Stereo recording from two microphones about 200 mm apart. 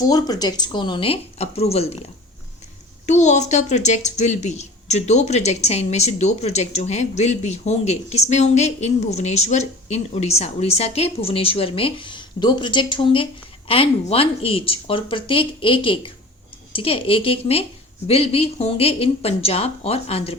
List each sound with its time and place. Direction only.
0.0 s speech: 20° left (ahead or behind)
3.1 s speech: 35° left (ahead or behind)